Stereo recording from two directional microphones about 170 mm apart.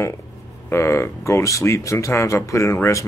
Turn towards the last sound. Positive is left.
turn(degrees=15)  # may be behind; listen again after turning